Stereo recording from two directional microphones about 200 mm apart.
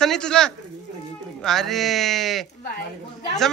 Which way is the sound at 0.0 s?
5° left (ahead or behind).